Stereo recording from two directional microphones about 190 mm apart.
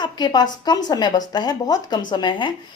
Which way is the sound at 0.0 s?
20° left (ahead or behind).